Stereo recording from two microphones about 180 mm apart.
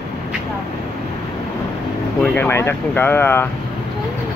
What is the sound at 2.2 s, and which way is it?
Speech, 10° left (ahead or behind).